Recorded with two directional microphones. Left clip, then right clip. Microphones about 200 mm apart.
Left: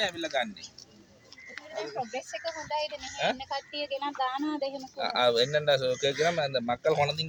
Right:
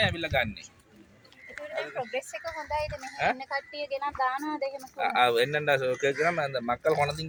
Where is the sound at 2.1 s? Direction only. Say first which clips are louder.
Right 1 dB; 5° left (ahead or behind).